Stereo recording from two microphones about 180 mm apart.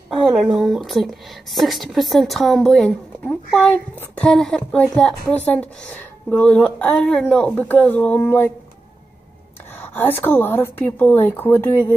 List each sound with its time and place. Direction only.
0.1 s a sound: centre (ahead or behind)
0.5 s a woman's voice: centre (ahead or behind)
9.8 s a woman's voice: 10° left (ahead or behind)